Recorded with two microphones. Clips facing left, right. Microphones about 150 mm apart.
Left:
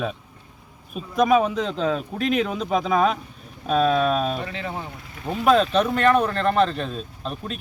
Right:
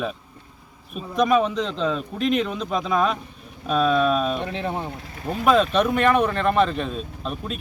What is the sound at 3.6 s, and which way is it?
Speech, 45° left (ahead or behind).